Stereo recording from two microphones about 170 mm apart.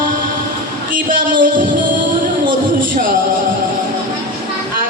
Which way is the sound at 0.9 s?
55° right (ahead or behind).